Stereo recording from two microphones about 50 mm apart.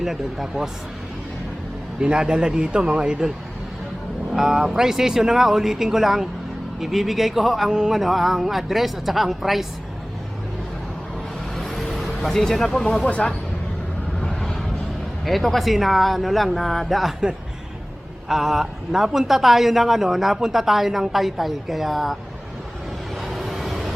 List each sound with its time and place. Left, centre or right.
0.0 s speech: centre
2.0 s a man's voice: centre
7.7 s speech: centre
7.9 s a man's voice: centre
11.5 s vehicle: centre
13.1 s speech: left
14.2 s vehicle: centre
15.2 s a man's voice: centre
18.3 s a man's voice: centre
23.2 s vehicle: centre